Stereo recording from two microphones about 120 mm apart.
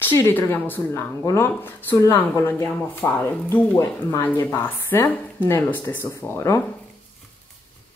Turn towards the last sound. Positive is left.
turn(degrees=20)  # may be behind; listen again after turning